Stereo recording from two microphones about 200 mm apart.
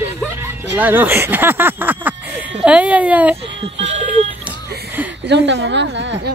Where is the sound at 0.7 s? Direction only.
10° right (ahead or behind).